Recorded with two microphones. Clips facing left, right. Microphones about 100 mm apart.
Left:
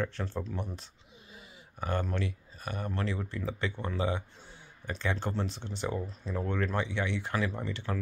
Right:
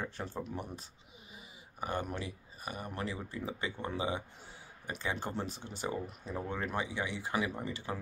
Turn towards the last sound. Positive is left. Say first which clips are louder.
# left 3 dB
turn(degrees=-10)  # may be behind; listen again after turning